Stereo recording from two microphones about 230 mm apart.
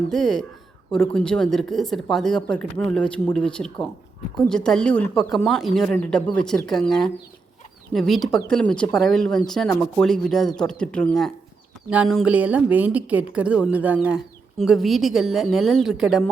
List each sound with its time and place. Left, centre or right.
0.1 s speech: centre